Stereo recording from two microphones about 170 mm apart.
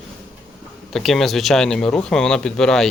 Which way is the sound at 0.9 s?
Centre (ahead or behind).